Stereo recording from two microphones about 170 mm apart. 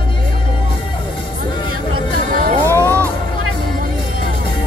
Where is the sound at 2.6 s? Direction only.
15° right (ahead or behind).